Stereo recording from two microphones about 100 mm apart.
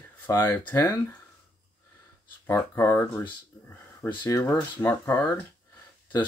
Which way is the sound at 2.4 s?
25° left (ahead or behind).